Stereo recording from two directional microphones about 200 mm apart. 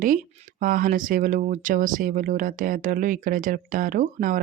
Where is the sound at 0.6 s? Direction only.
45° right (ahead or behind).